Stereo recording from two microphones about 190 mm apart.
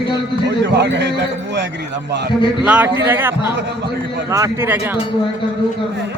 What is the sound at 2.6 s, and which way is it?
Speech, 10° right (ahead or behind).